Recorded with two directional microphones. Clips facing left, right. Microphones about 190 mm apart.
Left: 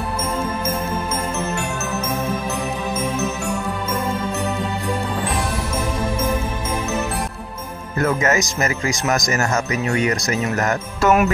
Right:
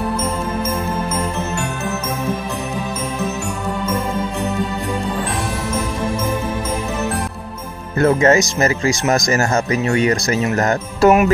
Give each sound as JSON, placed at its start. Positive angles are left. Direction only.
{"t": 8.0, "sound": "speech", "side_deg": -30}